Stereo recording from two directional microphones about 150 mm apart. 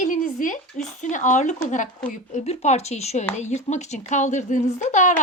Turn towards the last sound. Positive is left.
turn(degrees=55)  # may be behind; listen again after turning